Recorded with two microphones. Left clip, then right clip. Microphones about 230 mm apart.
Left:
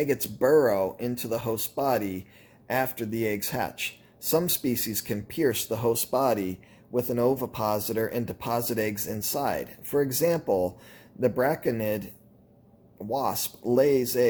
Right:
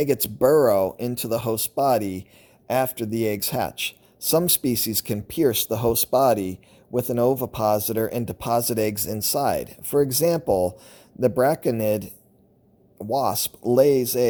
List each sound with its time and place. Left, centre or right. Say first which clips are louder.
0.0 s speech: right 5 dB; right
13.1 s speech: right 5 dB; right